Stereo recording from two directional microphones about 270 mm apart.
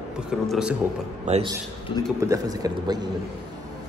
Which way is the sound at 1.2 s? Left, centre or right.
Right.